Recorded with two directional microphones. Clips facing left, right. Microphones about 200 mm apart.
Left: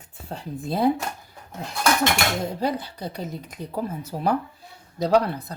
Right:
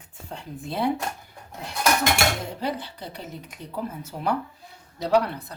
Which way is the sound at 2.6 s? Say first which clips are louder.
Left 4 dB; 40° left (ahead or behind).